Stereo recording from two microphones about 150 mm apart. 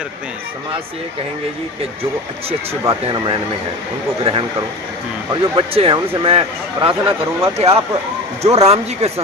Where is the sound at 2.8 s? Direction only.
30° right (ahead or behind).